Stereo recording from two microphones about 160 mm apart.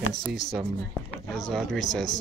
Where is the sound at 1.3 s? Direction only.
Centre (ahead or behind).